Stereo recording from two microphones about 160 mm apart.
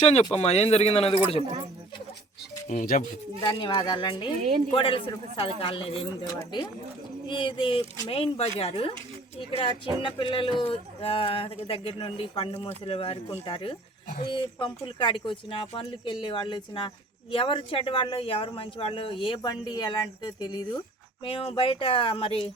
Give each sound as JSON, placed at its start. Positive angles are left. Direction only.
{"t": 0.0, "sound": "speech", "side_deg": 40}
{"t": 2.6, "sound": "speech", "side_deg": 55}
{"t": 3.4, "sound": "speech", "side_deg": 30}